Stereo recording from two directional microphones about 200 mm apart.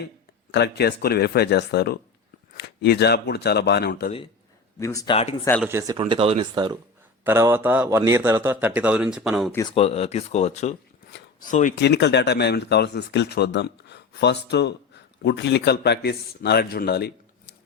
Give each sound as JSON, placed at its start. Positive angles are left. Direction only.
{"t": 0.5, "sound": "speech", "side_deg": 55}
{"t": 4.8, "sound": "speech", "side_deg": 15}
{"t": 5.6, "sound": "a man's voice", "side_deg": -15}
{"t": 9.7, "sound": "speech", "side_deg": 30}
{"t": 11.7, "sound": "speech", "side_deg": 60}